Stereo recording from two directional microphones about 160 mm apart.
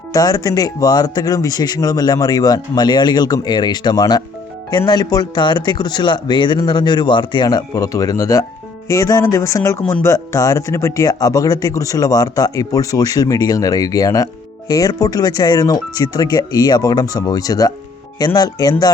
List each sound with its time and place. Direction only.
0.1 s speech: 20° left (ahead or behind)